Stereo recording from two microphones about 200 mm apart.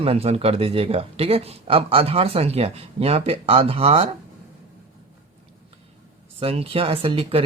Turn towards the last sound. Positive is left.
turn(degrees=-30)  # may be behind; listen again after turning